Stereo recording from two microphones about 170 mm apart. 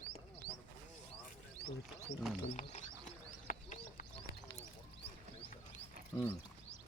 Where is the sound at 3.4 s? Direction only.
50° left (ahead or behind).